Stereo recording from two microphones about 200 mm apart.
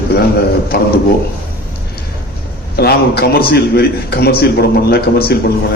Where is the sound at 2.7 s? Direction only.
55° left (ahead or behind).